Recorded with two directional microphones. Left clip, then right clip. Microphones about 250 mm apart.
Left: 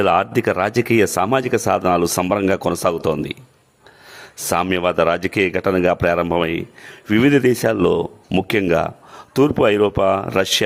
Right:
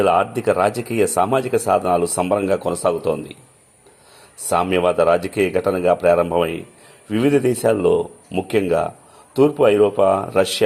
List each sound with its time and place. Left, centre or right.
0.0 s speech: left
4.4 s speech: left